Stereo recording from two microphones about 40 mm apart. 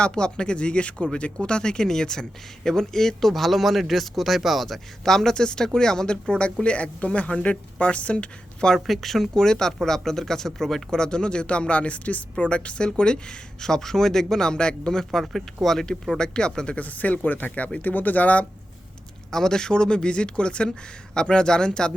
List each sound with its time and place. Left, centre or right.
0.0 s speech: left
8.9 s speech: centre
11.0 s speech: left
15.2 s speech: centre
16.1 s speech: left
16.7 s speech: left
17.5 s speech: left
17.8 s speech: left
19.3 s speech: centre